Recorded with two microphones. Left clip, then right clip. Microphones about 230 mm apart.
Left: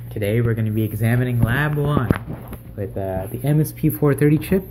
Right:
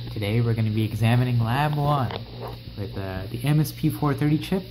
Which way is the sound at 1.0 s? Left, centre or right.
Right.